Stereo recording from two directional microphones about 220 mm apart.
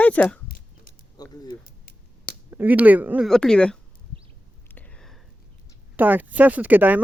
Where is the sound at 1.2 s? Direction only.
20° left (ahead or behind).